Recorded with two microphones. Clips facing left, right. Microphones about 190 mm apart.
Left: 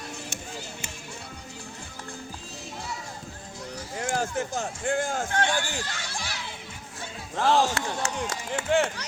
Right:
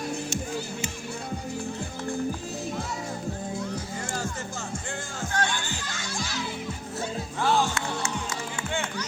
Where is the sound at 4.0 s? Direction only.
55° left (ahead or behind).